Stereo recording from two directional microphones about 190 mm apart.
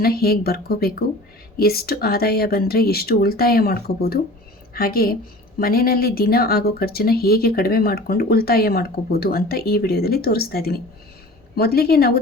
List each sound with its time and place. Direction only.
0.0 s a woman's voice: 55° left (ahead or behind)